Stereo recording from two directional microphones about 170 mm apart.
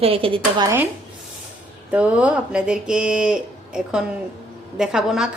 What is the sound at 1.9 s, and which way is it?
A woman's voice, 10° right (ahead or behind).